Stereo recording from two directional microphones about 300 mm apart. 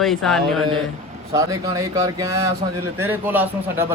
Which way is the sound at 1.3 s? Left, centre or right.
Centre.